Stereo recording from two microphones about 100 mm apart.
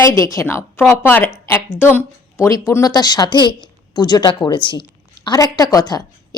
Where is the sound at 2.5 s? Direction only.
35° left (ahead or behind); by 5.3 s 55° left (ahead or behind).